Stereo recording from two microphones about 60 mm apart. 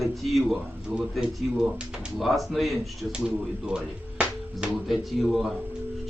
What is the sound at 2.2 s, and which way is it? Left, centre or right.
Speech, centre.